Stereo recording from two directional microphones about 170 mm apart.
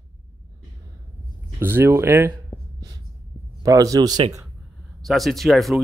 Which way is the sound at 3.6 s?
20° right (ahead or behind).